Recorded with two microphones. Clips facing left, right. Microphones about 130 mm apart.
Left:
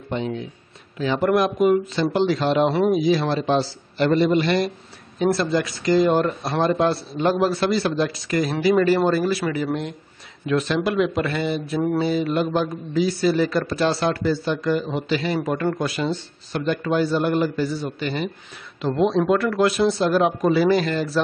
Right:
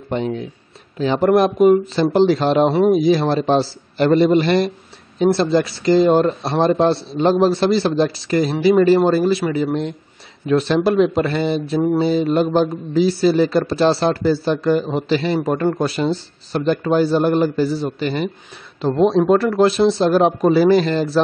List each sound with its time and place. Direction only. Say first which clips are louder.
0.9 s a man's voice: right 5 dB; 35° right (ahead or behind)